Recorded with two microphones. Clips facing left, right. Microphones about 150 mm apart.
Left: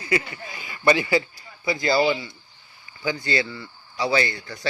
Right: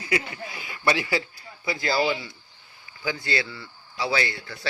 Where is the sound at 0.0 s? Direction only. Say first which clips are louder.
Left 2 dB; 5° right (ahead or behind).